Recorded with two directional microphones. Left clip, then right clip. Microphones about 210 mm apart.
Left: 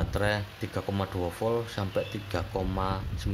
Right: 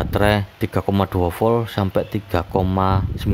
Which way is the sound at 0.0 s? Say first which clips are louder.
Right 11 dB; 45° right (ahead or behind).